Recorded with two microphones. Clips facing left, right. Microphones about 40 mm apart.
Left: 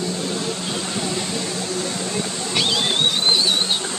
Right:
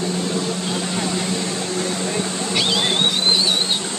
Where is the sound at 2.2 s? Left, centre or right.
Centre.